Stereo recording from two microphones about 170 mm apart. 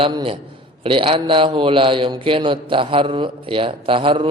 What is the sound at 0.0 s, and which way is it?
A man's voice, 30° right (ahead or behind).